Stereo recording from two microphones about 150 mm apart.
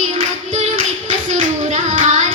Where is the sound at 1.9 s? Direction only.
55° right (ahead or behind).